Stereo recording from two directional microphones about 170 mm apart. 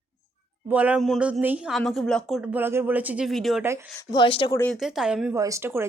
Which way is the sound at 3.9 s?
30° left (ahead or behind).